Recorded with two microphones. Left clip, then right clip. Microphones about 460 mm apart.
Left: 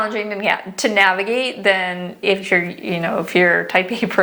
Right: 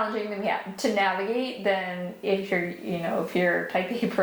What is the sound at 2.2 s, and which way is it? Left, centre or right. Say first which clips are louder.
A woman's voice: left 10 dB; left.